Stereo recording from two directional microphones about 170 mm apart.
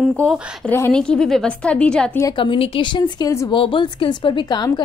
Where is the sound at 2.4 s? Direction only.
30° left (ahead or behind).